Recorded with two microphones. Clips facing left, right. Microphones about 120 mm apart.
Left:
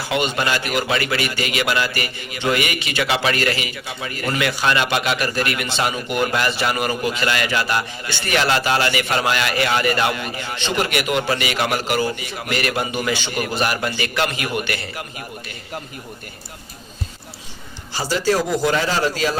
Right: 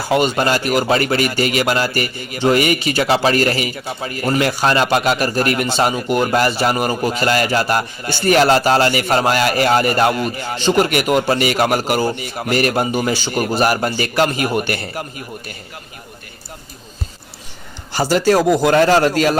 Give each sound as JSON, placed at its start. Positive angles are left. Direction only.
{"t": 0.1, "sound": "a man's voice", "side_deg": -40}
{"t": 17.9, "sound": "a man's voice", "side_deg": -55}